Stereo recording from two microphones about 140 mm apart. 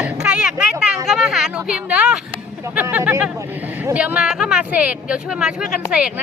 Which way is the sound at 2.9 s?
10° right (ahead or behind).